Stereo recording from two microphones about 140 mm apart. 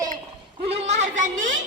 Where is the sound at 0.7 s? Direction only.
55° right (ahead or behind).